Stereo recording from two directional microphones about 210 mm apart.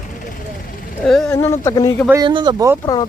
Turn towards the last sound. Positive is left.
turn(degrees=20)  # may be behind; listen again after turning